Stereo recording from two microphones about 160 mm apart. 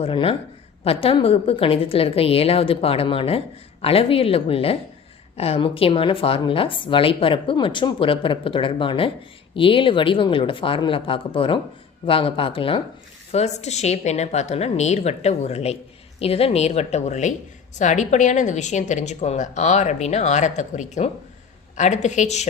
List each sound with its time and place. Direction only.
0.0 s a woman's voice: 35° left (ahead or behind)